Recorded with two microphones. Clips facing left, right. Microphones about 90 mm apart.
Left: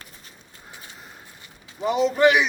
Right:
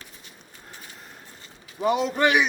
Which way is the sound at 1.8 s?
50° right (ahead or behind).